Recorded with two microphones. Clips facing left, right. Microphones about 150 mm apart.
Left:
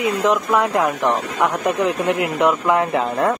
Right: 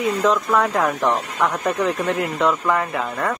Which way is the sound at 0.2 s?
15° left (ahead or behind).